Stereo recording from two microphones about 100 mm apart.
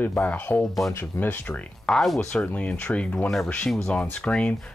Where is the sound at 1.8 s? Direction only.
5° left (ahead or behind).